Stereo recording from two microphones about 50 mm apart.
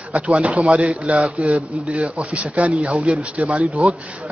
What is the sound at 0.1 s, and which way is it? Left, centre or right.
A man's voice, right.